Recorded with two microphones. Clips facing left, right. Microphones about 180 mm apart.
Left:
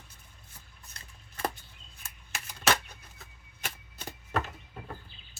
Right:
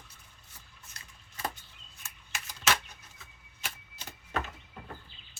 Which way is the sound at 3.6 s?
50° left (ahead or behind).